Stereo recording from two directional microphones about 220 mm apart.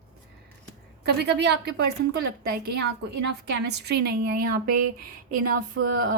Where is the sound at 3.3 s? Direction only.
50° right (ahead or behind).